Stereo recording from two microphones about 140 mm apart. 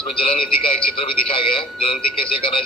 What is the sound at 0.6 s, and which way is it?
Speech, 40° left (ahead or behind).